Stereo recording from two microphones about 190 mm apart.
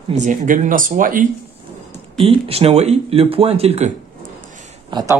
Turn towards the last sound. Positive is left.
turn(degrees=-20)  # may be behind; listen again after turning